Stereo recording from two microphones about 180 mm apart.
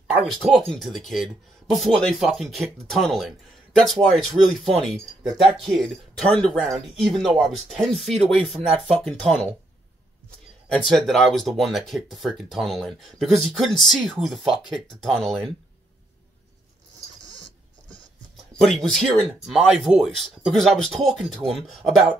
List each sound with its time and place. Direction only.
0.1 s speech: centre (ahead or behind)
10.7 s speech: centre (ahead or behind)
18.3 s speech: centre (ahead or behind)